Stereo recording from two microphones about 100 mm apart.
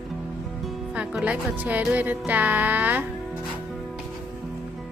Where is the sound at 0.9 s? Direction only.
10° right (ahead or behind).